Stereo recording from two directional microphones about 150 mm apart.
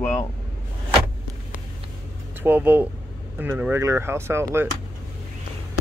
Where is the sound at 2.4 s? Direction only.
10° right (ahead or behind).